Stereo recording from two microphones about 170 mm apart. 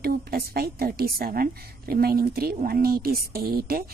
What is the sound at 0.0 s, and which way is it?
A woman's voice, 60° right (ahead or behind).